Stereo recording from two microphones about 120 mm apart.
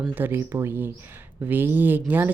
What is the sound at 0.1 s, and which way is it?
A woman's voice, 15° right (ahead or behind).